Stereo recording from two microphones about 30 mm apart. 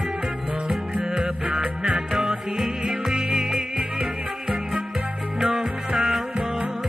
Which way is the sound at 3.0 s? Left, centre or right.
Centre.